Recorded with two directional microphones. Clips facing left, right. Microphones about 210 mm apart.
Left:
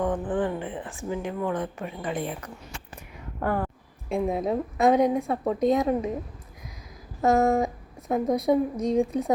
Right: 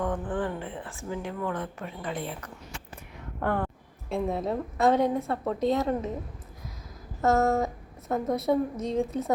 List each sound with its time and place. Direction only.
0.0 s speech: 15° left (ahead or behind)
3.4 s speech: 5° left (ahead or behind)
4.1 s speech: 15° left (ahead or behind)
7.2 s speech: 15° left (ahead or behind)